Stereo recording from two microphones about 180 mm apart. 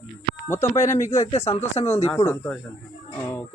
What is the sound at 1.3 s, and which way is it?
Speech, 35° left (ahead or behind).